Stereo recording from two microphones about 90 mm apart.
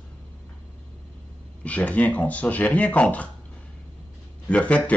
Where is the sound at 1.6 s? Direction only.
15° left (ahead or behind).